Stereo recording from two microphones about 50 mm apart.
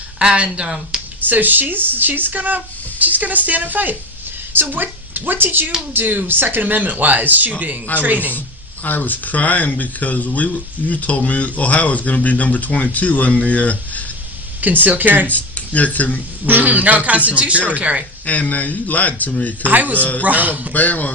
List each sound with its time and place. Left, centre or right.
0.2 s speech: right
1.3 s a woman's voice: right
8.8 s speech: left
14.6 s speech: right
15.3 s speech: left
16.5 s speech: right
18.3 s speech: left
19.6 s speech: right
20.0 s speech: left
20.2 s speech: right
20.7 s speech: left